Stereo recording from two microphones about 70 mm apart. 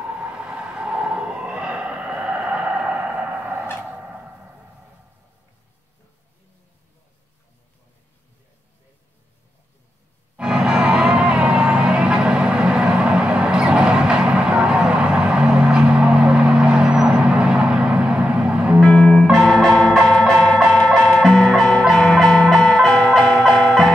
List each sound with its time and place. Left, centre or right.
0.0 s vehicle: centre
3.7 s a sound: right
10.3 s music: centre
18.8 s music: centre